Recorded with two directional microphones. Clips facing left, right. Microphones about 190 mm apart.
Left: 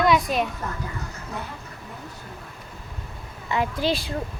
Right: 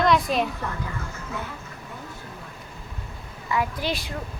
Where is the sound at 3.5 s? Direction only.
25° left (ahead or behind).